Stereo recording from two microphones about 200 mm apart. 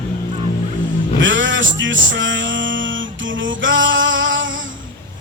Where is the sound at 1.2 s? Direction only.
70° right (ahead or behind).